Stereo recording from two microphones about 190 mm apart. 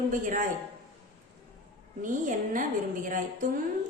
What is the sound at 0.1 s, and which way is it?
Speech, 45° right (ahead or behind).